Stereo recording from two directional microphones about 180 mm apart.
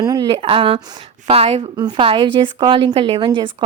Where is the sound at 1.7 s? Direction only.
25° right (ahead or behind).